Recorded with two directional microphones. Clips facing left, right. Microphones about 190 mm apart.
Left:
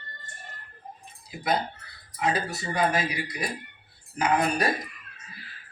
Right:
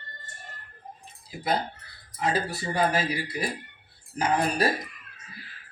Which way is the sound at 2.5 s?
35° right (ahead or behind).